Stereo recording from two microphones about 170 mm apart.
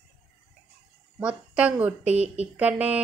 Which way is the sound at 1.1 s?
10° right (ahead or behind).